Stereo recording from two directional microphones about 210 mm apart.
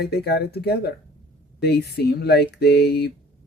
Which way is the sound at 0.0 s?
50° left (ahead or behind).